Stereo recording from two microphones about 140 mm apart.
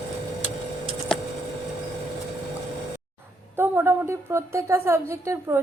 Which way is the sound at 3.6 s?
15° right (ahead or behind).